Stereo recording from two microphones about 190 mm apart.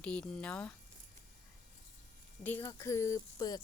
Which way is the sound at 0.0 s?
5° left (ahead or behind).